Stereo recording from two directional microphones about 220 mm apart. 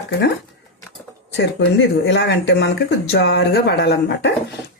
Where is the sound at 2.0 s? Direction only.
55° left (ahead or behind).